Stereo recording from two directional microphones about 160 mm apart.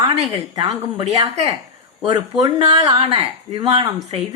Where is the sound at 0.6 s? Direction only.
35° right (ahead or behind).